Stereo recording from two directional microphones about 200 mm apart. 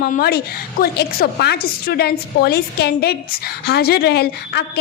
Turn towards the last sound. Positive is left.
turn(degrees=55)  # may be behind; listen again after turning